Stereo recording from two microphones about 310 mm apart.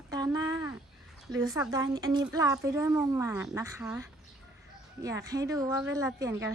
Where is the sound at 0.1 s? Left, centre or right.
Centre.